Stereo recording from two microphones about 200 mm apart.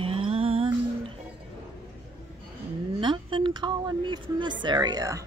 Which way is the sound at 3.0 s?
25° right (ahead or behind).